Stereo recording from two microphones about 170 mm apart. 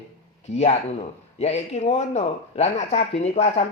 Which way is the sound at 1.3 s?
40° left (ahead or behind).